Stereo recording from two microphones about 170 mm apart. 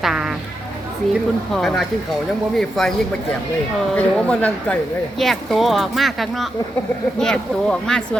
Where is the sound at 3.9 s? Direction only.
10° left (ahead or behind).